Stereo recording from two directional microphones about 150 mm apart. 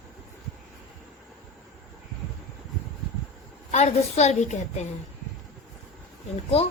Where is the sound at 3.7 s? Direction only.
50° left (ahead or behind).